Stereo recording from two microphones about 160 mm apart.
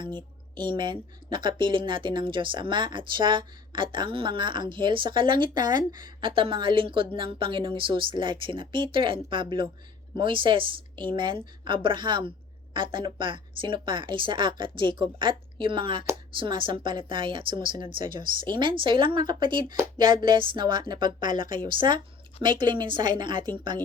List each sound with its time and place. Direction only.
0.0 s speech: 30° right (ahead or behind)